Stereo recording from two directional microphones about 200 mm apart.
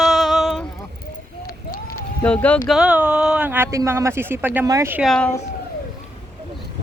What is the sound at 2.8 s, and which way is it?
Speech, 5° right (ahead or behind).